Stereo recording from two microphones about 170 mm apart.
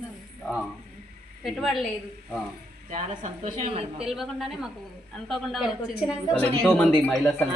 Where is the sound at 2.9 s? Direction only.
45° right (ahead or behind).